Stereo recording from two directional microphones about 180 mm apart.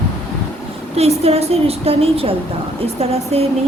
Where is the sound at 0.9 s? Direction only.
35° right (ahead or behind).